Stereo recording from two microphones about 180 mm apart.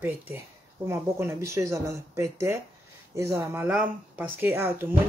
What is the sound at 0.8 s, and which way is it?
Speech, 15° right (ahead or behind).